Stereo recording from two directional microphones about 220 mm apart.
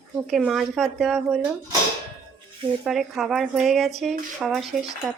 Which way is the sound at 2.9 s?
Centre (ahead or behind).